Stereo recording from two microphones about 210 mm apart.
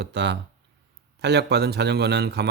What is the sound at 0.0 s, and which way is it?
Speech, 55° right (ahead or behind).